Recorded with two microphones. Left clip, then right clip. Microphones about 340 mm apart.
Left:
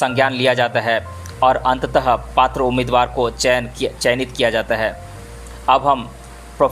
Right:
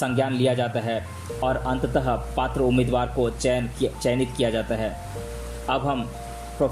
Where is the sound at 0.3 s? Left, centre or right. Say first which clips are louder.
Left 7 dB; centre.